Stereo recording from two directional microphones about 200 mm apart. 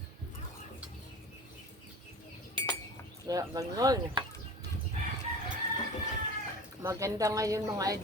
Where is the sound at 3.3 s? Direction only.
20° right (ahead or behind).